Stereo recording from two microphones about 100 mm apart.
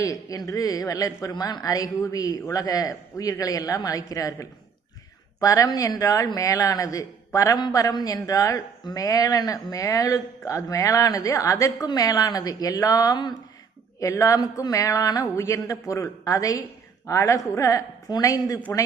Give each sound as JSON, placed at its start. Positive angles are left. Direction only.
{"t": 0.0, "sound": "speech", "side_deg": 35}